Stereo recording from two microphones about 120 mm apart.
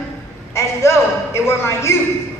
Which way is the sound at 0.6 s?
25° left (ahead or behind).